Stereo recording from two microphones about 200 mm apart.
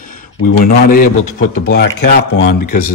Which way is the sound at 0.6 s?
45° left (ahead or behind).